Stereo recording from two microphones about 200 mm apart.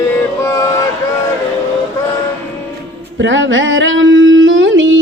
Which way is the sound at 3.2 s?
70° right (ahead or behind).